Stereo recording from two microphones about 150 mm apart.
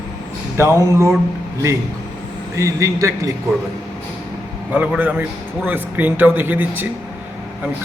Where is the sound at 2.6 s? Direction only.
20° right (ahead or behind).